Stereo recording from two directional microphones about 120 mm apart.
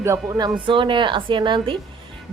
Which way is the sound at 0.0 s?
25° right (ahead or behind).